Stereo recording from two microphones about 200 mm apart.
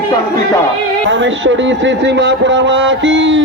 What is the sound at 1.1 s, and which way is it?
A man's voice, 70° right (ahead or behind).